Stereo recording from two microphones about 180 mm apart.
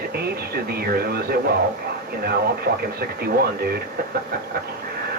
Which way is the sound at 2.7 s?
60° right (ahead or behind).